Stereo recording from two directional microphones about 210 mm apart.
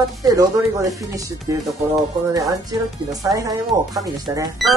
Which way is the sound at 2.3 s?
15° right (ahead or behind).